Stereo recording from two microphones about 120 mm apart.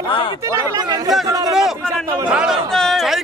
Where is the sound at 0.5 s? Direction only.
35° right (ahead or behind).